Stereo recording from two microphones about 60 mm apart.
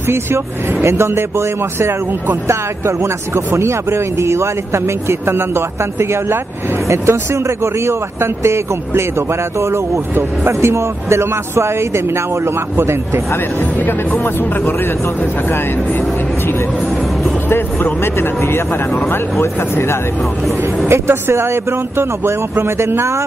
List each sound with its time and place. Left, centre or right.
0.1 s a man's voice: right
3.0 s a man's voice: right
13.8 s speech: left
17.5 s speech: left
20.9 s a man's voice: right